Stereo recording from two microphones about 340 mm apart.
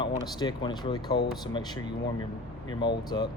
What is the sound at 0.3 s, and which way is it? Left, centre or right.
Speech, centre.